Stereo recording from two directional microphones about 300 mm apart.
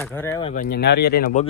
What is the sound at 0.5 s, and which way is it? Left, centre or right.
Speech, left.